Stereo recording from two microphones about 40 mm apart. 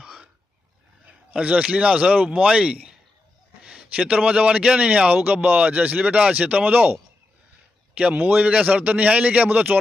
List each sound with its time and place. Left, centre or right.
0.0 s roaring cats: right
1.3 s a man's voice: right
7.9 s speech: right